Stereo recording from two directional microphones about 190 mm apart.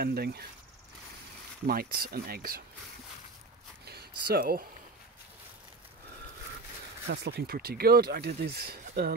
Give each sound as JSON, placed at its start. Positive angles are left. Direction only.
{"t": 0.0, "sound": "speech", "side_deg": -55}
{"t": 1.7, "sound": "speech", "side_deg": -50}
{"t": 3.8, "sound": "a sound", "side_deg": -55}
{"t": 7.1, "sound": "speech", "side_deg": -60}